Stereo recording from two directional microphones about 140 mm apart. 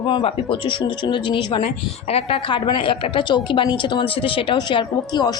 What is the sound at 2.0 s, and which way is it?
A woman's voice, 45° left (ahead or behind).